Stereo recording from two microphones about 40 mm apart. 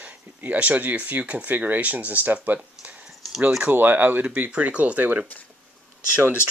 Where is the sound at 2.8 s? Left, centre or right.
Right.